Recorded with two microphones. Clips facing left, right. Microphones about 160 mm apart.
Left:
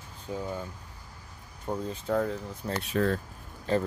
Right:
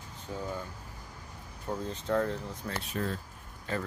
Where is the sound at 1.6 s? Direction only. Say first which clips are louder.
Left 2 dB; 10° left (ahead or behind).